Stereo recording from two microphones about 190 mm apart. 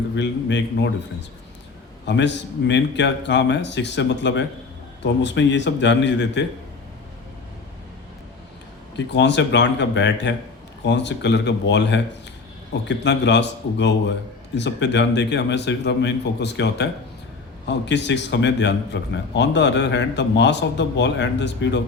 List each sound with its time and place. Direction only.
0.2 s a man's voice: 70° left (ahead or behind)
2.0 s a man's voice: 65° left (ahead or behind)
9.1 s a man's voice: 65° left (ahead or behind)